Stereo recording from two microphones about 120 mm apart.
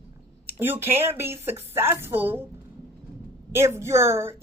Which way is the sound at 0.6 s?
20° right (ahead or behind).